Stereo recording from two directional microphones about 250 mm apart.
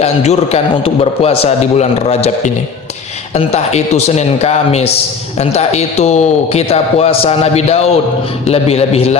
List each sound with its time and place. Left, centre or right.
0.0 s a man's voice: left